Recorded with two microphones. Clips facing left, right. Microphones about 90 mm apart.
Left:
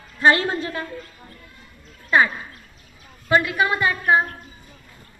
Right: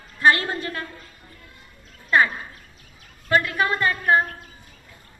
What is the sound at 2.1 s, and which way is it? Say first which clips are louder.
Speech: left 1 dB; 5° left (ahead or behind).